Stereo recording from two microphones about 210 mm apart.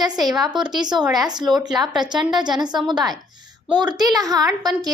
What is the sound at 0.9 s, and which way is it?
Speech, centre (ahead or behind).